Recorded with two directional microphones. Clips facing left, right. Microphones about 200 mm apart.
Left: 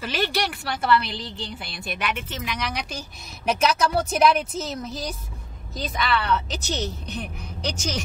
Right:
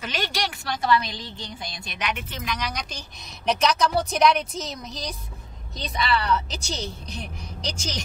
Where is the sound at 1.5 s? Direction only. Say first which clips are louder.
Left 3 dB; 65° left (ahead or behind).